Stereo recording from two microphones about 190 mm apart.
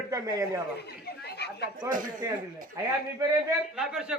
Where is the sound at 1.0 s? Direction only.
60° left (ahead or behind).